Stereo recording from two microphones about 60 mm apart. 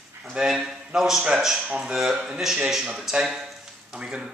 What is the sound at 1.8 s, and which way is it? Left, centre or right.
Speech, centre.